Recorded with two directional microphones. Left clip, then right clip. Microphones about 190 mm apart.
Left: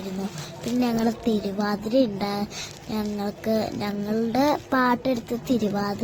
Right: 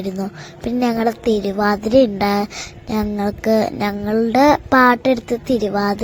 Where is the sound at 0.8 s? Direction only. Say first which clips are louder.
Right 7 dB; 45° right (ahead or behind).